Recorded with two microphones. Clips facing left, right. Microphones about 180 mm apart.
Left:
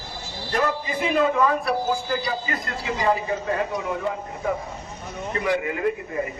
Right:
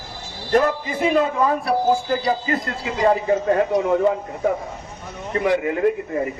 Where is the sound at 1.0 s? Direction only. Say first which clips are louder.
Right 2 dB; 30° right (ahead or behind).